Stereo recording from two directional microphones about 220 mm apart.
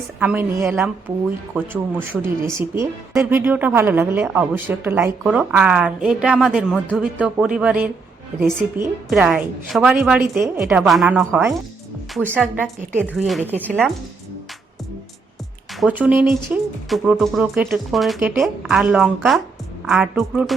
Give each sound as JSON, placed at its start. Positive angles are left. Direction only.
{"t": 0.2, "sound": "speech", "side_deg": -10}
{"t": 1.1, "sound": "speech", "side_deg": -25}
{"t": 1.5, "sound": "speech", "side_deg": -10}
{"t": 15.8, "sound": "speech", "side_deg": -5}